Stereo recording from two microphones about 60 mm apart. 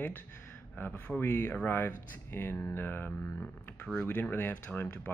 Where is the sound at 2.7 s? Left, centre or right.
Left.